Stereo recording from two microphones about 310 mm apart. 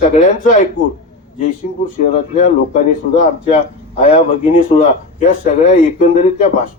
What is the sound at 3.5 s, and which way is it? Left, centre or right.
Speech, left.